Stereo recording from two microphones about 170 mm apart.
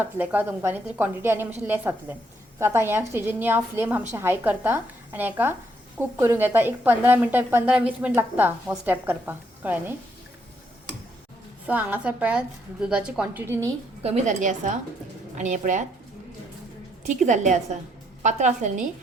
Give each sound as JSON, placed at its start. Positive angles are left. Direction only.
{"t": 0.0, "sound": "a woman's voice", "side_deg": -10}
{"t": 11.6, "sound": "a woman's voice", "side_deg": -10}
{"t": 14.0, "sound": "a woman's voice", "side_deg": -40}
{"t": 17.0, "sound": "a woman's voice", "side_deg": -45}